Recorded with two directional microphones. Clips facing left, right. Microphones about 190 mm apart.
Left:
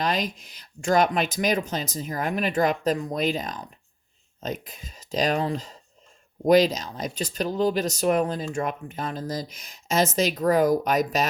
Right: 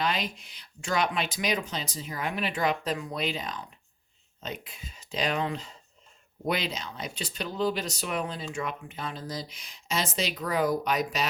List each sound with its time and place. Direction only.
0.0 s speech: 40° left (ahead or behind)